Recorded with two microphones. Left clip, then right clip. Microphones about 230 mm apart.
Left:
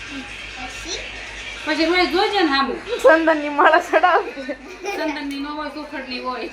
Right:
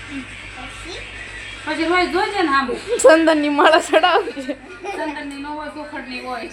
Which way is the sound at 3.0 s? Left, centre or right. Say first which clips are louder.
Right 2 dB; right.